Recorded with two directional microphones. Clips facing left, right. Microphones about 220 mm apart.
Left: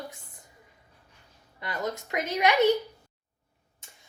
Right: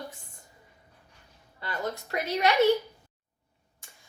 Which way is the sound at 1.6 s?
20° left (ahead or behind).